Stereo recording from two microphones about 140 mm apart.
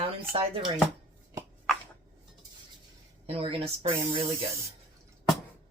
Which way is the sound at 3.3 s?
45° right (ahead or behind).